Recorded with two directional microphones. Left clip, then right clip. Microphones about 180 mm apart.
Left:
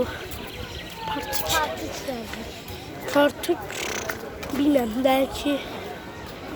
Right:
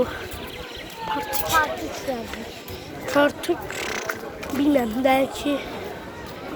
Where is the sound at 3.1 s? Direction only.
15° left (ahead or behind).